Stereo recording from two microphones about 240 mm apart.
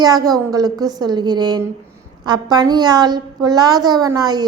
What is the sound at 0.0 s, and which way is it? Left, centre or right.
A woman's voice, centre.